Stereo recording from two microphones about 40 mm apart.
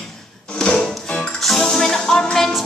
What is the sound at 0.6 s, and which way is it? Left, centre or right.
Speech, centre.